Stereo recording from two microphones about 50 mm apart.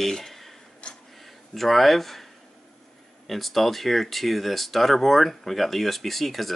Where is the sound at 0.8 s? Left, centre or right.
Centre.